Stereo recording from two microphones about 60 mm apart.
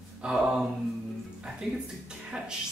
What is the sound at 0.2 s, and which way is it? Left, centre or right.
Mantra, centre.